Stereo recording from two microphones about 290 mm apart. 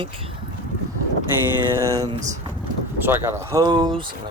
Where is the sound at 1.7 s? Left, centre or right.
Centre.